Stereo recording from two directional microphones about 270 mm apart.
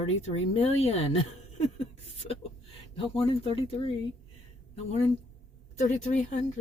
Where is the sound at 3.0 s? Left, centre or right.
Left.